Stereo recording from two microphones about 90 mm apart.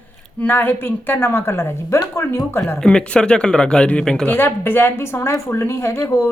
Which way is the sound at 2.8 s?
10° left (ahead or behind).